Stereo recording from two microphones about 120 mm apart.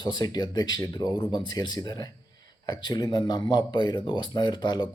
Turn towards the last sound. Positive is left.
turn(degrees=40)  # may be behind; listen again after turning